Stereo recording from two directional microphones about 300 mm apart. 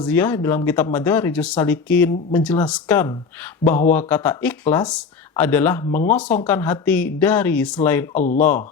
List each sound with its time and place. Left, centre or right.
0.0 s speech: centre
3.6 s speech: left
3.9 s speech: centre
5.9 s speech: left
6.1 s speech: centre